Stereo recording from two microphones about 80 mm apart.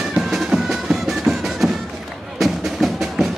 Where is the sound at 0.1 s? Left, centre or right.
Centre.